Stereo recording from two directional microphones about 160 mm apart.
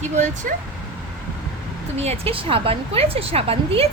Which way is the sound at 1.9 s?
40° right (ahead or behind).